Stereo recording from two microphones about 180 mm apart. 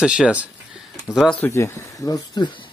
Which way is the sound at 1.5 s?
15° left (ahead or behind).